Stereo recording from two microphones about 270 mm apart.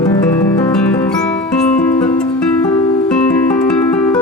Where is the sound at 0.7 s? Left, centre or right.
Centre.